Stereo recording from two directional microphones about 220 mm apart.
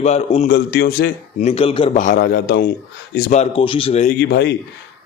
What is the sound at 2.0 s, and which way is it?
Speech, 40° left (ahead or behind).